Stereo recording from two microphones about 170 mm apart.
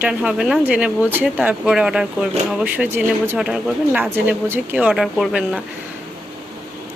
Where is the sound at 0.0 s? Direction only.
5° right (ahead or behind).